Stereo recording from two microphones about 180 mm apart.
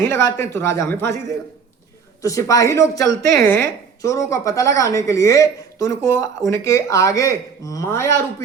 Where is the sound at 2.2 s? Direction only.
20° left (ahead or behind).